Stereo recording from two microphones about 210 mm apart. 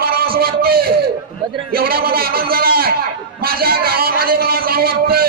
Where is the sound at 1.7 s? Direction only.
45° right (ahead or behind).